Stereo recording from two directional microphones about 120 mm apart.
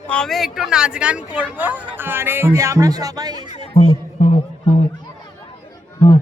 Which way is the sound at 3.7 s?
75° left (ahead or behind).